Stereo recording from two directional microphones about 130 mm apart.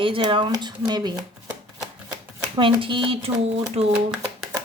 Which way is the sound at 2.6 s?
40° right (ahead or behind).